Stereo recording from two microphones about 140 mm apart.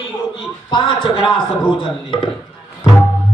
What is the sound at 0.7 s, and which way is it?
Speech, 35° left (ahead or behind).